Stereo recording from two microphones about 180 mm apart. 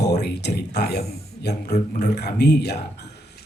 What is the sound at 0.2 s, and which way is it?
Speech, 65° left (ahead or behind).